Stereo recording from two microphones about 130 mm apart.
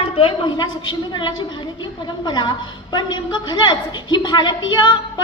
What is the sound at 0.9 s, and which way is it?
A woman's voice, 35° left (ahead or behind).